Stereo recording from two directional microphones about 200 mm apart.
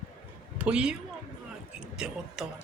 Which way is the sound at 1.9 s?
5° right (ahead or behind).